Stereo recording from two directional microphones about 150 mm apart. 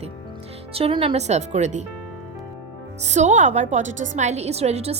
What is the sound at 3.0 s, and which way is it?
Speech, 50° right (ahead or behind).